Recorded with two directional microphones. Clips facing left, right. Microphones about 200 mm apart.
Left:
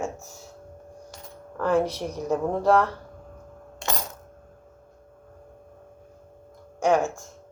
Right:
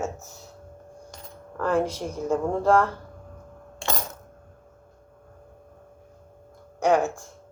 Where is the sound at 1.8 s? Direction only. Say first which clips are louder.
Even; 10° right (ahead or behind).